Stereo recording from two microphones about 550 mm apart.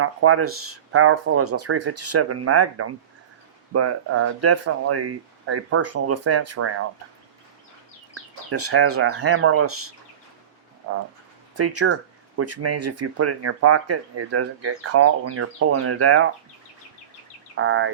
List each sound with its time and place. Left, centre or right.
0.0 s speech: right
8.4 s speech: right
11.5 s speech: right
17.6 s speech: right